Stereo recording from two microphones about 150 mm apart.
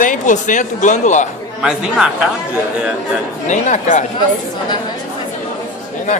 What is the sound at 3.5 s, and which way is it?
Speech, 55° left (ahead or behind).